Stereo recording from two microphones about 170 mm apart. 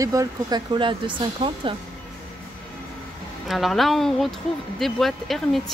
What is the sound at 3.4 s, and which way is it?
Speech, centre (ahead or behind).